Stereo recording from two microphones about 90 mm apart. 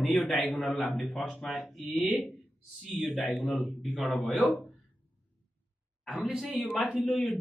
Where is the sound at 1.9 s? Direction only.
10° left (ahead or behind).